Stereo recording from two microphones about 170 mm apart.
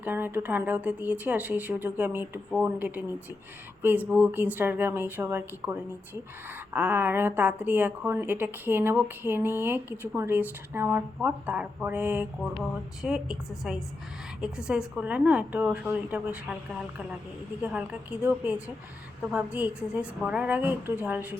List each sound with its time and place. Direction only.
0.0 s a woman's voice: 10° right (ahead or behind)
17.6 s a woman's voice: 10° right (ahead or behind)